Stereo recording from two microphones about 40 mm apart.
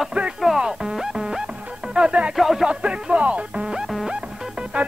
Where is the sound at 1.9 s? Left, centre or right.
Right.